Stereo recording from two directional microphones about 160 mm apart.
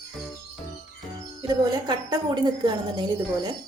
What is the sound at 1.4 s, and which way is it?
A woman's voice, 25° right (ahead or behind).